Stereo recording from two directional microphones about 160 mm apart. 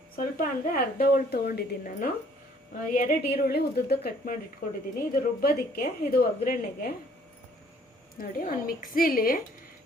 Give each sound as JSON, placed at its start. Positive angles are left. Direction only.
{"t": 0.2, "sound": "a woman's voice", "side_deg": 60}
{"t": 2.9, "sound": "a woman's voice", "side_deg": 55}
{"t": 8.2, "sound": "a woman's voice", "side_deg": 60}